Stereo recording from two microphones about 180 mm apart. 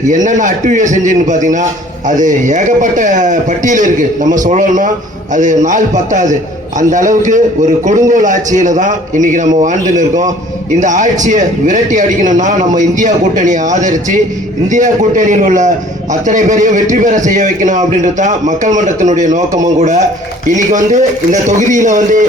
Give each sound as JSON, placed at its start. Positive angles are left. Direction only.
{"t": 0.0, "sound": "a man's voice", "side_deg": -45}